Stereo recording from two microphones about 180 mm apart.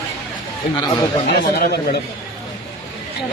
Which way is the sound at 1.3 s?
65° left (ahead or behind).